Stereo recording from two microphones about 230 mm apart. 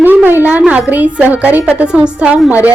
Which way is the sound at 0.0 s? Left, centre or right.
Centre.